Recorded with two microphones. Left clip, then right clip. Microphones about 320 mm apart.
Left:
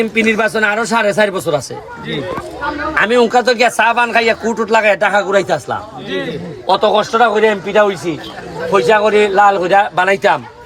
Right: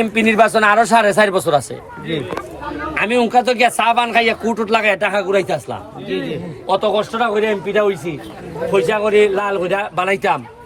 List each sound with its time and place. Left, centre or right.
0.1 s speech: centre
3.0 s speech: centre
4.4 s speech: right
4.7 s speech: centre
6.7 s speech: centre